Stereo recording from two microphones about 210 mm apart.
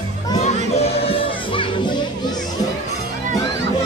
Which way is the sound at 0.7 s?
30° left (ahead or behind).